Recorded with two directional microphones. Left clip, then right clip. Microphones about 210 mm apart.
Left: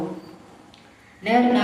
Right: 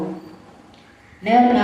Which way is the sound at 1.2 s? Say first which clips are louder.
Right 4 dB; 45° left (ahead or behind).